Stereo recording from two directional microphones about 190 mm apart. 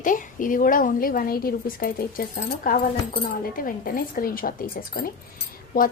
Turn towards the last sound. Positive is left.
turn(degrees=50)  # may be behind; listen again after turning